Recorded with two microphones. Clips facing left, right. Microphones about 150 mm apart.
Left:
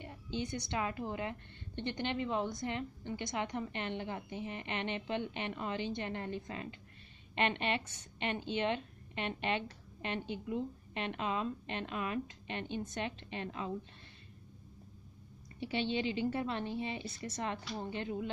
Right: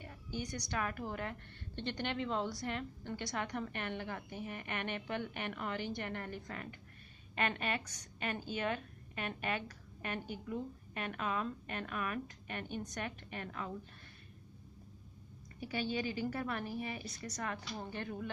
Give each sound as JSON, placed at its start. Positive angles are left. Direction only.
{"t": 0.0, "sound": "a woman's voice", "side_deg": 25}
{"t": 15.6, "sound": "a woman's voice", "side_deg": 25}